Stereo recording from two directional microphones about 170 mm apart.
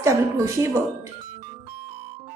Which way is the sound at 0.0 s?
15° right (ahead or behind).